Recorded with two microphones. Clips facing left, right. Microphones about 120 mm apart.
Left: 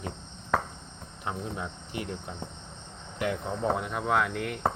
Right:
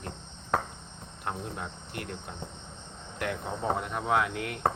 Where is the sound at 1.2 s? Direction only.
Centre (ahead or behind).